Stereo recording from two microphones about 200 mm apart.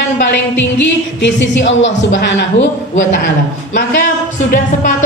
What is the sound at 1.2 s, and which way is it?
A man's voice, 65° left (ahead or behind).